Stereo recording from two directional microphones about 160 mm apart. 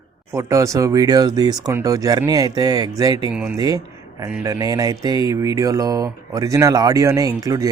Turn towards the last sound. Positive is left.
turn(degrees=-20)  # may be behind; listen again after turning